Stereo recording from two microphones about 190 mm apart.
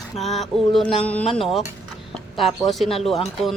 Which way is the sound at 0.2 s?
Centre (ahead or behind).